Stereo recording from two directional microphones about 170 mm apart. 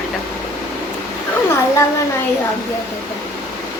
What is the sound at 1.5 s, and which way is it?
Speech, 15° left (ahead or behind).